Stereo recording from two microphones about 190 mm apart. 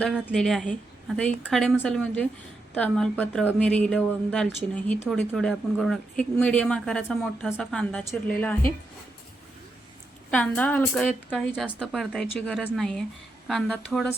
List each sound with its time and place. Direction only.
0.0 s a woman's voice: centre (ahead or behind)
10.3 s speech: 5° left (ahead or behind)